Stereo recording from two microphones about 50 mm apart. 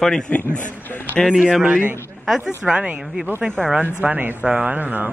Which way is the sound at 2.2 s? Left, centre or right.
Centre.